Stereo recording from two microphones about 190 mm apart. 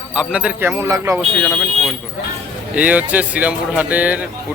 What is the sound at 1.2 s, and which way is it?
Speech, centre (ahead or behind).